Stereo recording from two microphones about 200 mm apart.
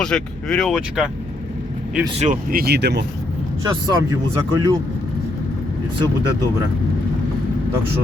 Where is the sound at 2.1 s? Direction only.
40° right (ahead or behind); by 3.0 s 55° right (ahead or behind).